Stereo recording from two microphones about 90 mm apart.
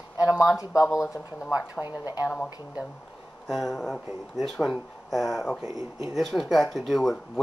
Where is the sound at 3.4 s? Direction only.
Centre (ahead or behind).